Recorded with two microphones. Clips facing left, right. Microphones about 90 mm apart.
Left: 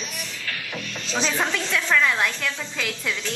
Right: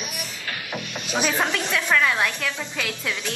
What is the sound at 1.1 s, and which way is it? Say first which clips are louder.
A woman's voice: right 1 dB; 15° right (ahead or behind).